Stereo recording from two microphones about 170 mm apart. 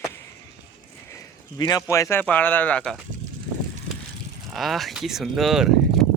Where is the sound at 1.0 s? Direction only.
20° left (ahead or behind).